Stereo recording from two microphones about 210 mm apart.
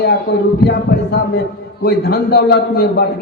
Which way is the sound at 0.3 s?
50° left (ahead or behind).